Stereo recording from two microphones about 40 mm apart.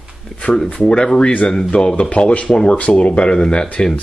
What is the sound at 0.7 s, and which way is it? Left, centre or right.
Speech, left.